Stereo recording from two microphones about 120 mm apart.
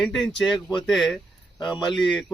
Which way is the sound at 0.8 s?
Centre (ahead or behind).